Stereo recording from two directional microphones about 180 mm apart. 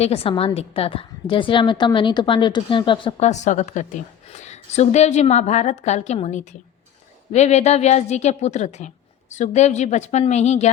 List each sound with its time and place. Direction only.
0.0 s a woman's voice: 35° left (ahead or behind)